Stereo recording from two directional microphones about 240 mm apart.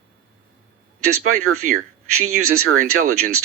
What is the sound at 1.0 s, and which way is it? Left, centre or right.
A man's voice, right.